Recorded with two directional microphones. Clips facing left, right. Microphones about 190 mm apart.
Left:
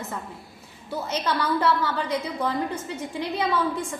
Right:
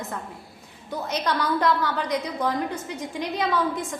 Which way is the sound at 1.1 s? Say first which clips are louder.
Even; 15° right (ahead or behind).